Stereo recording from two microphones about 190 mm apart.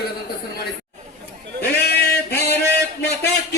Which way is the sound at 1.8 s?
55° left (ahead or behind).